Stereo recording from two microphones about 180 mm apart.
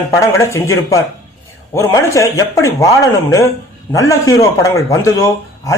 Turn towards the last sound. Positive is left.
turn(degrees=15)  # may be behind; listen again after turning